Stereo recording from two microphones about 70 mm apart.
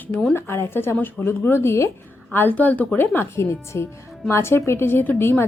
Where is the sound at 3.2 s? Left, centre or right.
Left.